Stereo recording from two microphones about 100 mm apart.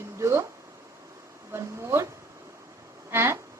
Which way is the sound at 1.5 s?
30° right (ahead or behind).